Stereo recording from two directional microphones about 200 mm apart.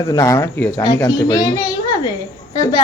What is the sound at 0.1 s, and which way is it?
A man's voice, 15° left (ahead or behind).